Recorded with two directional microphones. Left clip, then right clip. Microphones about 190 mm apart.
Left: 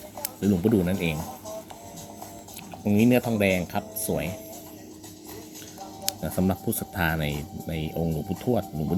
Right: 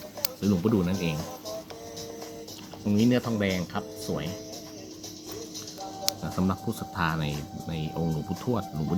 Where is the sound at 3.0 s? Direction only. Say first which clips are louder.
Left 4 dB; 15° left (ahead or behind).